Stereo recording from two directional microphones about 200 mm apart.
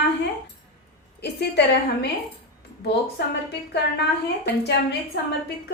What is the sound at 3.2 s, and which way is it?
Speech, 55° left (ahead or behind).